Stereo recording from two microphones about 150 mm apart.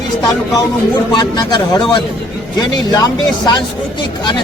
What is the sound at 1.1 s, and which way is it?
Speech, 30° left (ahead or behind).